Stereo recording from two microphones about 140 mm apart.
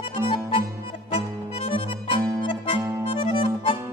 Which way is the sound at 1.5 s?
40° left (ahead or behind).